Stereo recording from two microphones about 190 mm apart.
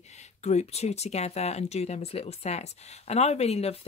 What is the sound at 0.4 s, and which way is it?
Speech, 35° left (ahead or behind).